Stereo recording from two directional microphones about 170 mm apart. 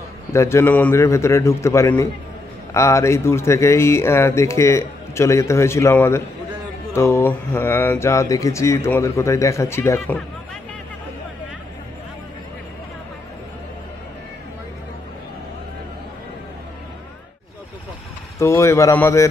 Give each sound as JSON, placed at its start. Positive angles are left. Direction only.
{"t": 0.3, "sound": "speech", "side_deg": 15}
{"t": 18.4, "sound": "speech", "side_deg": 15}